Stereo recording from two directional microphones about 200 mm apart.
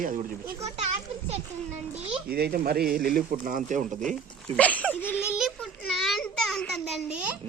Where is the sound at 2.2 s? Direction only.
50° right (ahead or behind).